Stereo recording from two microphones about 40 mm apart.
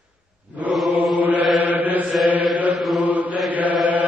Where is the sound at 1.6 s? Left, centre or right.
Right.